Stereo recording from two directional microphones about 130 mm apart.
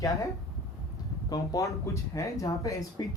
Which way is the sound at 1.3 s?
25° left (ahead or behind).